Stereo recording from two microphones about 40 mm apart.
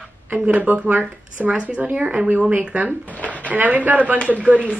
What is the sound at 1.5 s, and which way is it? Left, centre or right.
Speech, right.